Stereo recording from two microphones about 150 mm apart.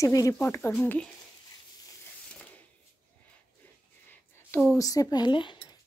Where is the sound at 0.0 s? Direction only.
20° left (ahead or behind).